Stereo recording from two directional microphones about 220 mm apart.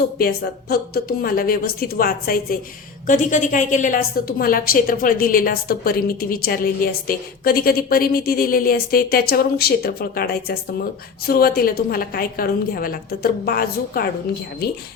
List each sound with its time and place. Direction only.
0.2 s a woman's voice: 45° left (ahead or behind)